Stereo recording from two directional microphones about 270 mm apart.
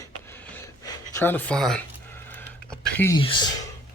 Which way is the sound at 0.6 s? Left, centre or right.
Centre.